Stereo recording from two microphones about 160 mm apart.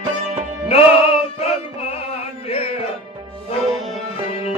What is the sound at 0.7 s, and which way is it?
Music, 40° left (ahead or behind).